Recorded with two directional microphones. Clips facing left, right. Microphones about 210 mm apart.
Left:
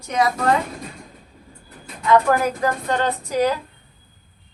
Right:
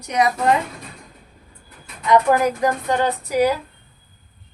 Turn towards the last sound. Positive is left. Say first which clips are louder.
# right 2 dB
turn(degrees=-10)  # may be behind; listen again after turning